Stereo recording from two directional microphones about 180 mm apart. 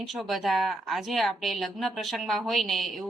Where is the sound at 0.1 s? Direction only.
Centre (ahead or behind).